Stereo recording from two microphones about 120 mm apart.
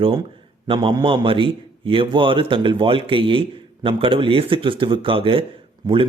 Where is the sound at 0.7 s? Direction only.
40° right (ahead or behind).